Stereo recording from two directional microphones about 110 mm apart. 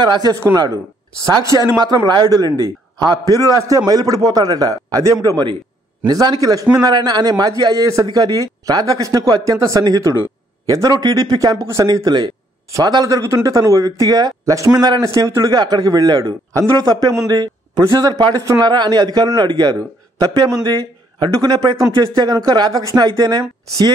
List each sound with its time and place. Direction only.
0.0 s speech: 40° right (ahead or behind)